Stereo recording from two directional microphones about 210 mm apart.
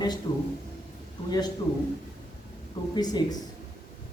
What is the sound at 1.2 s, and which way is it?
Speech, 20° left (ahead or behind).